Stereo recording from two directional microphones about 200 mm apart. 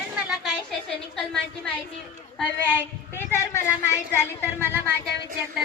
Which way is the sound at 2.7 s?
10° left (ahead or behind).